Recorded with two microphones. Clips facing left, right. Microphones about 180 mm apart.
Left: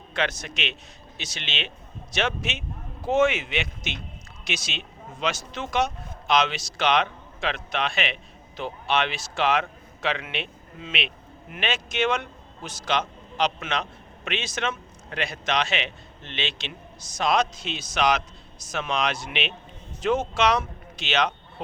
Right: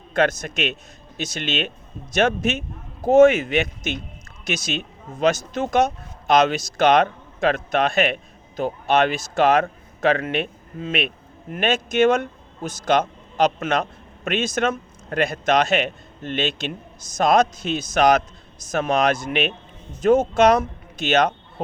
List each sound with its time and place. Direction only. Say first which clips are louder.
0.1 s a man's voice: right 8 dB; 45° right (ahead or behind)